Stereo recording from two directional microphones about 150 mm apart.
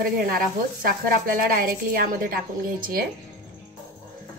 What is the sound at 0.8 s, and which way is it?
A woman's voice, 75° right (ahead or behind).